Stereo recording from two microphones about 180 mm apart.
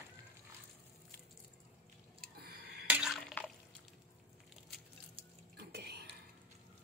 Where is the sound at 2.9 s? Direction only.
5° right (ahead or behind).